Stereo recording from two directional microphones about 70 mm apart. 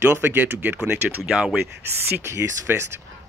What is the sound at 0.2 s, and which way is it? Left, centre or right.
Speech, right.